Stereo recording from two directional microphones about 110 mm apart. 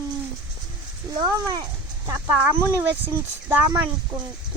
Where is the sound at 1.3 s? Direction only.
35° right (ahead or behind).